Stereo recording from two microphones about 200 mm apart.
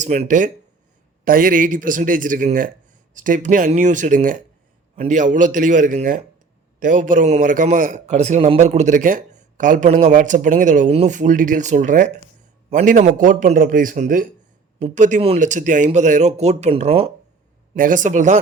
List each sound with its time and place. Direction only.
0.0 s a man's voice: 35° right (ahead or behind)
17.7 s a man's voice: 40° right (ahead or behind)